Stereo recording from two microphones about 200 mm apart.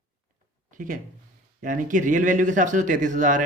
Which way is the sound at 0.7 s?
40° right (ahead or behind).